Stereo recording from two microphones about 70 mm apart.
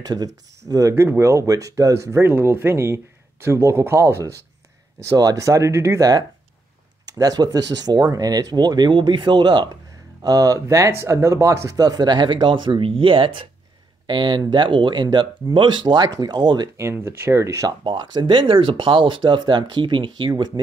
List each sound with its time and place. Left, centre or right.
0.0 s speech: right
1.0 s speech: right
5.1 s speech: right
5.9 s speech: right
10.2 s speech: right
11.7 s speech: right
14.0 s speech: right
16.7 s speech: right
17.6 s speech: right